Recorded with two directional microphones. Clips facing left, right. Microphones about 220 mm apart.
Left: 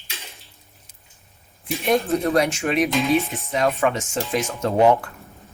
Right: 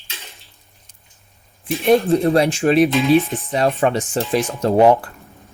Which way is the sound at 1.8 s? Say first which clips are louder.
Right 6 dB; 30° right (ahead or behind).